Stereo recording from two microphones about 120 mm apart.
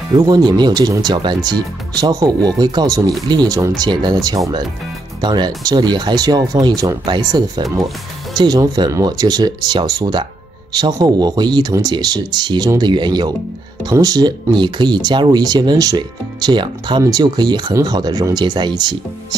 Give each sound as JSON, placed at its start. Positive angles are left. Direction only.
{"t": 0.1, "sound": "speech", "side_deg": -35}